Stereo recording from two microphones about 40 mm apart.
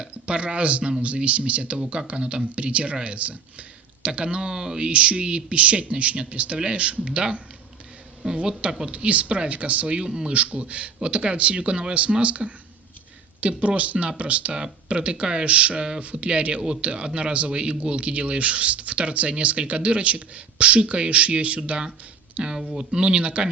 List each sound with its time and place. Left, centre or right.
0.0 s speech: right
4.9 s speech: right
22.5 s speech: centre; by 23.5 s right